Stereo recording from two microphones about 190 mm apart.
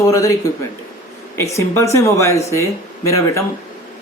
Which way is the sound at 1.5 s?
15° left (ahead or behind).